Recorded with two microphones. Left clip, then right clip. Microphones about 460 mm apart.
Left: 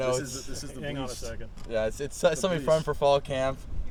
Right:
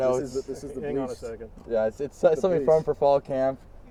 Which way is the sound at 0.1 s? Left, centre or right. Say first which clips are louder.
Right 4 dB; left.